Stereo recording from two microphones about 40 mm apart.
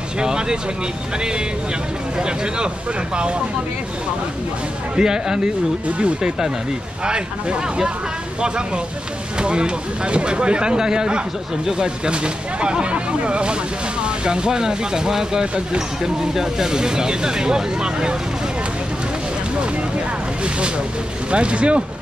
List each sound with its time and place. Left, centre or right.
0.2 s a sound: right
2.1 s speech: right
4.9 s speech: centre
20.4 s speech: right